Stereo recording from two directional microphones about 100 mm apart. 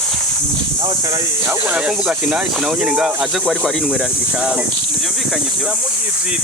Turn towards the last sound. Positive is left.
turn(degrees=-5)  # may be behind; listen again after turning